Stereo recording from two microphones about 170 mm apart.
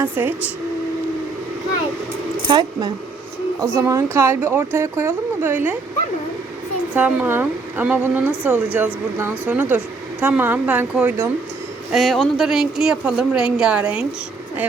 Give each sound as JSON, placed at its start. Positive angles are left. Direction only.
{"t": 0.0, "sound": "speech", "side_deg": -10}
{"t": 2.5, "sound": "speech", "side_deg": -25}
{"t": 6.9, "sound": "speech", "side_deg": -10}
{"t": 11.9, "sound": "speech", "side_deg": 0}